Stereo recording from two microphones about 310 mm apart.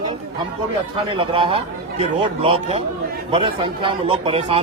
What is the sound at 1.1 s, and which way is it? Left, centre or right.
A man's voice, centre.